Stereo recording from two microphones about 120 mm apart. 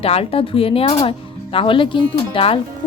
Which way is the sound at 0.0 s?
55° left (ahead or behind).